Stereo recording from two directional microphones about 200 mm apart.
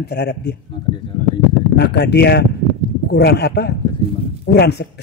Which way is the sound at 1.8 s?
55° left (ahead or behind).